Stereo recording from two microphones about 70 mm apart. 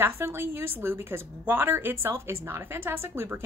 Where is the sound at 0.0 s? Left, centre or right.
Right.